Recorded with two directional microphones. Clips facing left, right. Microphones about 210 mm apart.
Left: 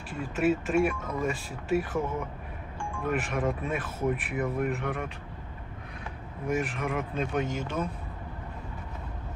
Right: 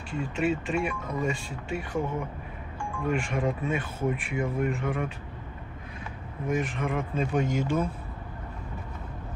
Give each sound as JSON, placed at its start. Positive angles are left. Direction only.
{"t": 0.1, "sound": "speech", "side_deg": 5}
{"t": 3.1, "sound": "speech", "side_deg": 5}
{"t": 6.5, "sound": "speech", "side_deg": 5}
{"t": 7.4, "sound": "speech", "side_deg": -15}